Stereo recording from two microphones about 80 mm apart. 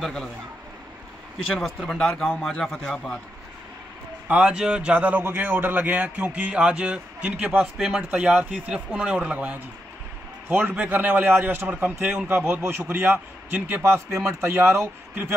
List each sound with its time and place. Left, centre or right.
0.0 s a man's voice: centre
1.9 s a man's voice: centre
4.3 s a man's voice: centre
7.5 s a man's voice: centre; by 15.3 s right